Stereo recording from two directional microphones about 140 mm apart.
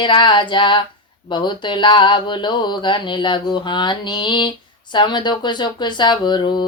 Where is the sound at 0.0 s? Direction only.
35° left (ahead or behind).